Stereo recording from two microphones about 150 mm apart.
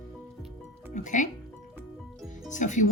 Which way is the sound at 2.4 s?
55° left (ahead or behind).